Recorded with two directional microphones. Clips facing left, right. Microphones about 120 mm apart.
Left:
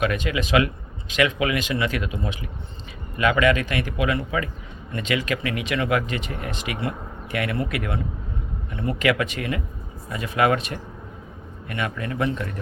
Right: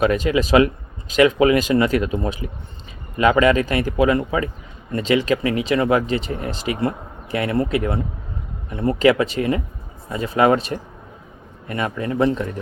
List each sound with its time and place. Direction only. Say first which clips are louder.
0.0 s speech: right 6 dB; 35° right (ahead or behind)